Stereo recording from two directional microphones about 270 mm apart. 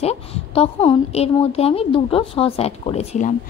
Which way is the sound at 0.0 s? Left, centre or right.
Left.